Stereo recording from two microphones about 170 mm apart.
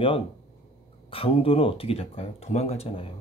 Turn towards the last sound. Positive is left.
turn(degrees=35)  # may be behind; listen again after turning